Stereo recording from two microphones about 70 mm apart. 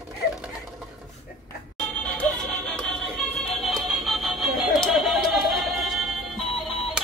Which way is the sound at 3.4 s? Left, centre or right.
Centre.